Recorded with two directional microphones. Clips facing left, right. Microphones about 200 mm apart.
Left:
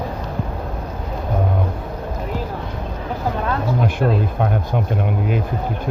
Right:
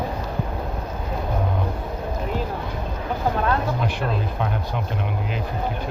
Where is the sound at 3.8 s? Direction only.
50° left (ahead or behind).